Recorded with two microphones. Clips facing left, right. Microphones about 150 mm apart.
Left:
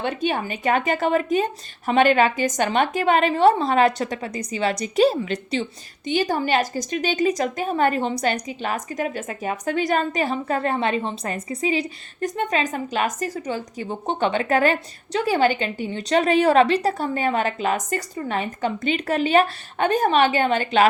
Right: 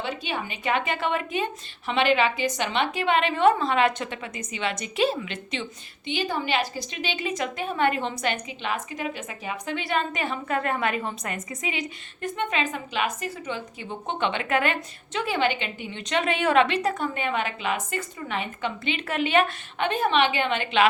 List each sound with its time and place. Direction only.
0.0 s a woman's voice: 50° left (ahead or behind)